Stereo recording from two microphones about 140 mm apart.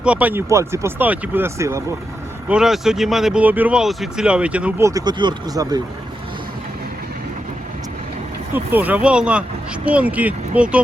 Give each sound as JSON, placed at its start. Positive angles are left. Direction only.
{"t": 0.0, "sound": "speech", "side_deg": -10}
{"t": 2.5, "sound": "speech", "side_deg": -5}
{"t": 4.8, "sound": "speech", "side_deg": -25}
{"t": 8.5, "sound": "speech", "side_deg": -10}